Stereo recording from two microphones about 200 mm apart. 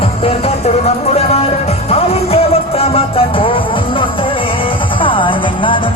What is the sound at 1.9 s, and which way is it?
Music, 30° left (ahead or behind).